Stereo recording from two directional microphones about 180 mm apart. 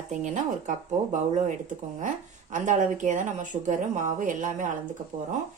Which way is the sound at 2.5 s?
45° right (ahead or behind).